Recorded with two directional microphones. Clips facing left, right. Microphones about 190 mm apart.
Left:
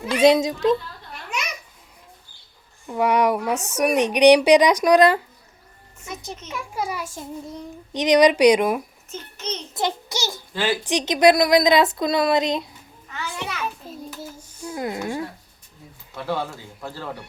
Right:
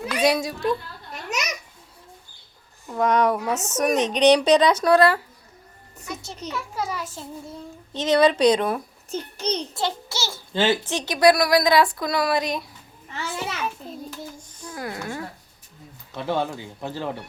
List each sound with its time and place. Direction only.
0.1 s speech: 25° left (ahead or behind)
1.1 s babbling: 40° right (ahead or behind)
2.9 s a child's voice: 10° left (ahead or behind)
6.5 s a child's voice: 15° left (ahead or behind)
9.0 s a child's voice: 35° right (ahead or behind)
9.7 s a child's voice: 15° left (ahead or behind)
10.5 s speech: 25° right (ahead or behind)
10.8 s speech: 20° left (ahead or behind)
13.1 s a sound: 30° right (ahead or behind)
14.1 s child singing: 5° left (ahead or behind)
14.7 s speech: 20° left (ahead or behind)
16.1 s speech: 20° right (ahead or behind)